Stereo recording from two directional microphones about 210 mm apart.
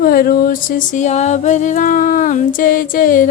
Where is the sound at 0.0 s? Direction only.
45° left (ahead or behind).